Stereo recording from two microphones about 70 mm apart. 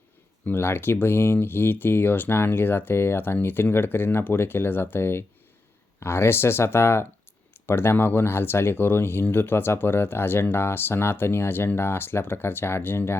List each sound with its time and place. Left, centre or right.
0.4 s speech: left